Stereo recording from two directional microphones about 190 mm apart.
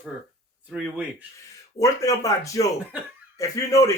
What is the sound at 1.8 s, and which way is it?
Speech, 15° left (ahead or behind).